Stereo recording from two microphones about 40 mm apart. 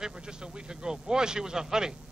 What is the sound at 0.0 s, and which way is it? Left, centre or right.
A man's voice, centre.